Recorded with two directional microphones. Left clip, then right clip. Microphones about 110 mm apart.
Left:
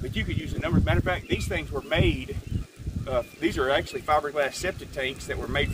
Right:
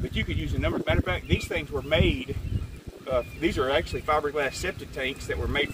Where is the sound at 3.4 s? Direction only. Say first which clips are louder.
Left 2 dB; 35° left (ahead or behind).